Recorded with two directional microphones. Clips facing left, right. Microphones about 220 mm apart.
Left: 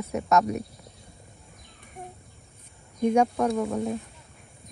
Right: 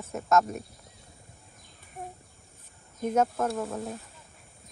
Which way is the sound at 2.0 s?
Centre (ahead or behind).